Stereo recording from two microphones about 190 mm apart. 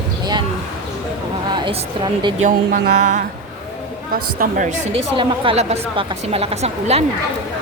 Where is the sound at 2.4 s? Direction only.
40° right (ahead or behind).